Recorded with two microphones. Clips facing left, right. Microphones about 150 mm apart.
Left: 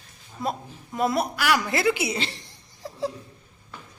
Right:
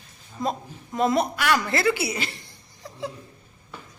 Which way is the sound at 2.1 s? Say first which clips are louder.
Left 1 dB; 30° left (ahead or behind).